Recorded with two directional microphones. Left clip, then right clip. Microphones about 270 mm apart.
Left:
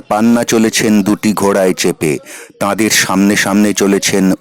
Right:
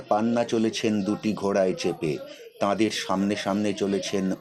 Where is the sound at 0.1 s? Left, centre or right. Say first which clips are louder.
Left 11 dB; left.